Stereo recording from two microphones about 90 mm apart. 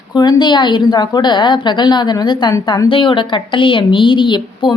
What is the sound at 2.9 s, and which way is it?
A woman's voice, 75° left (ahead or behind).